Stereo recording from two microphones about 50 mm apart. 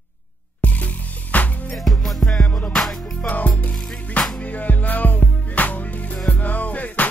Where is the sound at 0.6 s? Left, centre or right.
Left.